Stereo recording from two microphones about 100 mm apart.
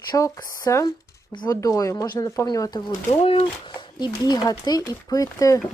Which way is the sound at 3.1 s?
75° left (ahead or behind).